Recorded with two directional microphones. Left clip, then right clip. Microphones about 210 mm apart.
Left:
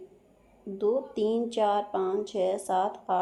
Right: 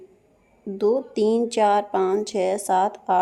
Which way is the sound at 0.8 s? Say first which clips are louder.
Right 6 dB; 45° right (ahead or behind).